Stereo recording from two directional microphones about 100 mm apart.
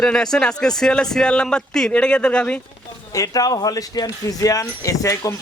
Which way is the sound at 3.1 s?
35° left (ahead or behind).